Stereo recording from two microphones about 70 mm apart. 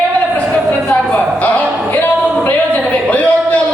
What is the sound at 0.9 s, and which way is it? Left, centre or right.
Speech, left.